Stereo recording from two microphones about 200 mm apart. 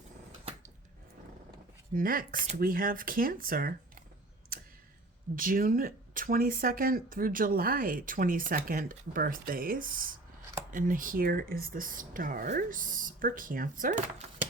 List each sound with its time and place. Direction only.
1.9 s speech: 45° right (ahead or behind)
5.4 s speech: 45° right (ahead or behind)